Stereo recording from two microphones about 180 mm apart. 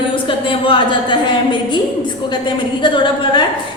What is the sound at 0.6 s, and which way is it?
Speech, 25° left (ahead or behind).